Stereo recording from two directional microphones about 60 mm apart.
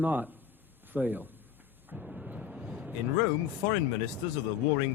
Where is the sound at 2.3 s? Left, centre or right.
Right.